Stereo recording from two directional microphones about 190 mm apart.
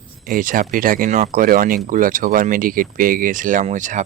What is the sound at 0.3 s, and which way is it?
Speech, 45° right (ahead or behind).